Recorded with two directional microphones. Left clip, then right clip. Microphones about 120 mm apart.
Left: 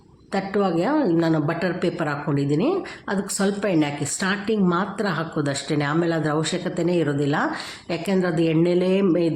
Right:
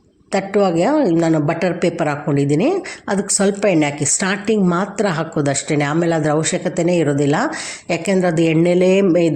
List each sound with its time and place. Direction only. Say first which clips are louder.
0.3 s a woman's voice: right 7 dB; 35° right (ahead or behind)